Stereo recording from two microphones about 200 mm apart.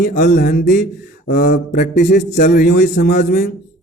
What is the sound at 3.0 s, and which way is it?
Speech, 55° left (ahead or behind).